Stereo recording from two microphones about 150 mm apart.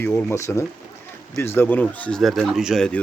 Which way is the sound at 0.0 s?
15° left (ahead or behind).